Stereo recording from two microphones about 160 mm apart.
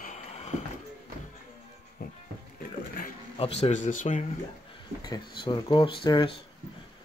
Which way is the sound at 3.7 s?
55° left (ahead or behind).